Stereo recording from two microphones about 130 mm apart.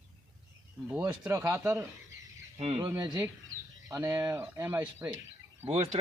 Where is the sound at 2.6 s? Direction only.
50° right (ahead or behind).